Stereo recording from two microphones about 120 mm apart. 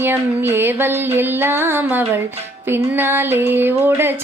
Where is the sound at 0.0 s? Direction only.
20° right (ahead or behind).